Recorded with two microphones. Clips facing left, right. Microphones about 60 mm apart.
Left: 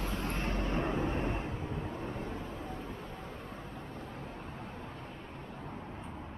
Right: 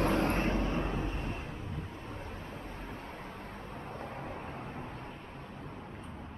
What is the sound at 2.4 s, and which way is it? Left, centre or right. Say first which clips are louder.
Vehicle: left 2 dB; right.